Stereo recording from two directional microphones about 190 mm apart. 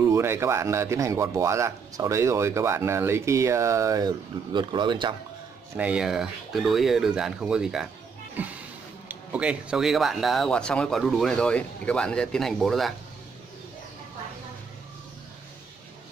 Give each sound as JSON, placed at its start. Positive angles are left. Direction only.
{"t": 0.0, "sound": "a man's voice", "side_deg": -15}
{"t": 5.8, "sound": "speech", "side_deg": -5}
{"t": 9.1, "sound": "speech", "side_deg": -5}